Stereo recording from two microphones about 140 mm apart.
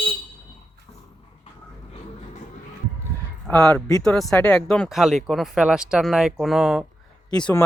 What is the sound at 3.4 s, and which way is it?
Speech, 10° left (ahead or behind).